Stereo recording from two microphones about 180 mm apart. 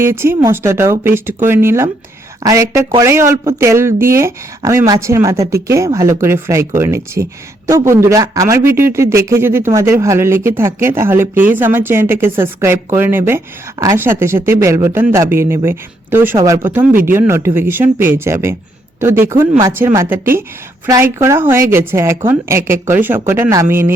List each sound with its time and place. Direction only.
0.0 s speech: 15° right (ahead or behind)